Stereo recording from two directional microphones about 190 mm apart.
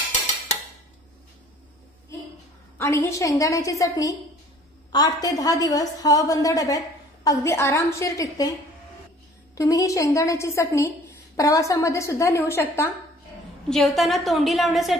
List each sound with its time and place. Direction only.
2.8 s a woman's voice: 15° left (ahead or behind)
9.6 s a woman's voice: 15° left (ahead or behind)
13.7 s a woman's voice: centre (ahead or behind)